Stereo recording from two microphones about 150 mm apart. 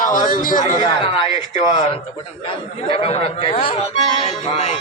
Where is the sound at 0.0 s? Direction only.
60° left (ahead or behind).